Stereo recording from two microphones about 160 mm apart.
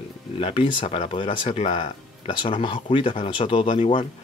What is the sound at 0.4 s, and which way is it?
Speech, 35° left (ahead or behind).